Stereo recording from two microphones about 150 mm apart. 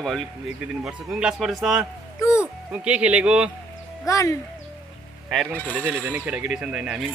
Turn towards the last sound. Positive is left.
turn(degrees=-5)  # may be behind; listen again after turning